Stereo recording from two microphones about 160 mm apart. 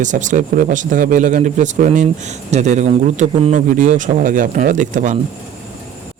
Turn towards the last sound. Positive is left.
turn(degrees=-50)  # may be behind; listen again after turning